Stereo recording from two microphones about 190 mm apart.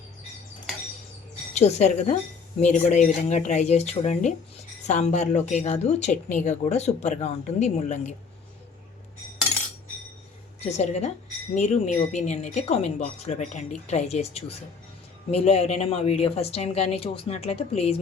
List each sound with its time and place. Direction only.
1.5 s speech: 35° left (ahead or behind)
10.6 s speech: 35° left (ahead or behind)